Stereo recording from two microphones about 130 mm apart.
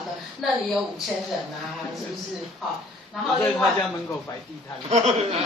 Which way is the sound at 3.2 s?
Centre (ahead or behind).